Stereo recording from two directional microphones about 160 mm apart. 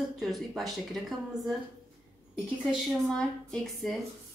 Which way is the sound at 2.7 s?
Centre (ahead or behind).